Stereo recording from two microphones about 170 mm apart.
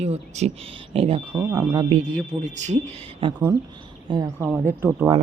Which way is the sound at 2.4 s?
45° right (ahead or behind).